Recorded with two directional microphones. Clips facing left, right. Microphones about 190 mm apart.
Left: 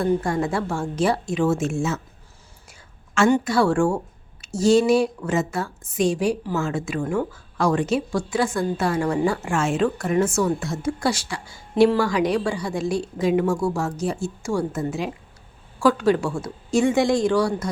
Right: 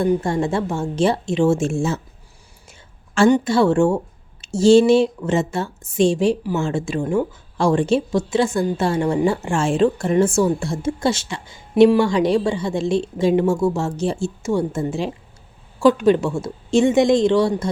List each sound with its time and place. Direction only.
0.0 s a woman's voice: 20° right (ahead or behind)
3.2 s a woman's voice: 20° right (ahead or behind)